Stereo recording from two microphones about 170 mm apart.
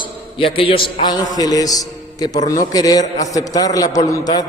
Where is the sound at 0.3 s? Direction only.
30° left (ahead or behind).